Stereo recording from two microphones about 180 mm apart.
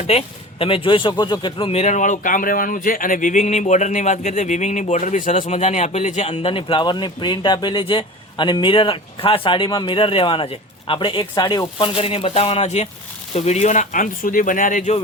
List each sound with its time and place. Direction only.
0.1 s speech: 35° left (ahead or behind)